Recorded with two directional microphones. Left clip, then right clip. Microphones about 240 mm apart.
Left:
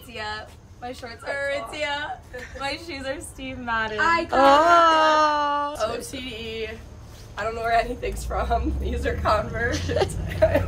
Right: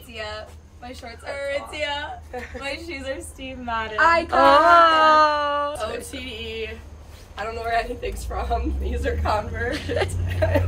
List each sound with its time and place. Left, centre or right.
0.1 s a man's voice: centre
2.3 s a woman's voice: centre
2.6 s a man's voice: centre